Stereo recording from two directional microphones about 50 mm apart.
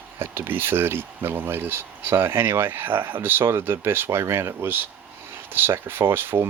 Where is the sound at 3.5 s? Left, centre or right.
Right.